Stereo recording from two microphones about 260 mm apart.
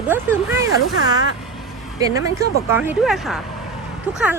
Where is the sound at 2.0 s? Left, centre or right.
Centre.